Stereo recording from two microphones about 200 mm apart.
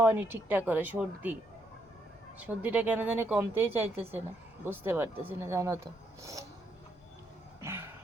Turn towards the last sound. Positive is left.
turn(degrees=-10)  # may be behind; listen again after turning